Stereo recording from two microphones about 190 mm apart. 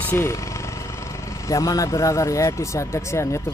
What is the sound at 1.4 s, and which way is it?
Speech, 15° left (ahead or behind).